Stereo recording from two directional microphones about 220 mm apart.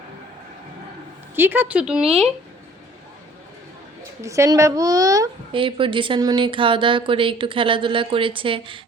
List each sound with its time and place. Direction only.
1.4 s speech: 10° right (ahead or behind)
4.2 s a child's voice: 15° right (ahead or behind)